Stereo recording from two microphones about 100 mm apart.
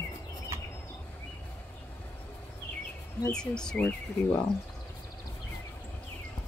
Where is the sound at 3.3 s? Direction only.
5° left (ahead or behind).